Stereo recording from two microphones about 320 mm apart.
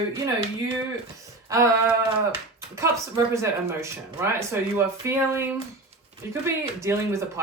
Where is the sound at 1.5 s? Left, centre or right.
Centre.